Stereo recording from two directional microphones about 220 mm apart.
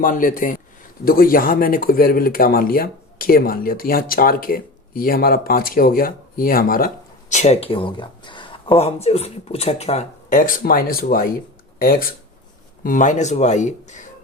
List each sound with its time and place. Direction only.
0.0 s speech: 40° left (ahead or behind)